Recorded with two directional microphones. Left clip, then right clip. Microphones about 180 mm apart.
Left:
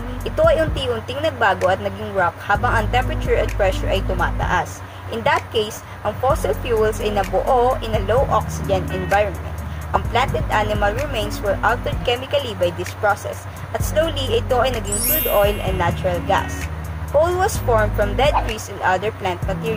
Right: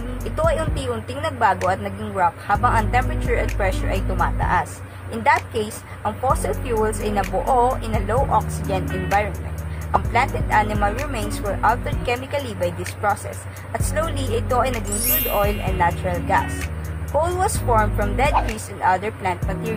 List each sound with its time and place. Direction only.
0.2 s speech: 15° right (ahead or behind)
9.9 s speech: 15° right (ahead or behind)
14.7 s speech: centre (ahead or behind)
15.8 s speech: 15° right (ahead or behind)
18.3 s speech: centre (ahead or behind)
18.9 s speech: 15° right (ahead or behind)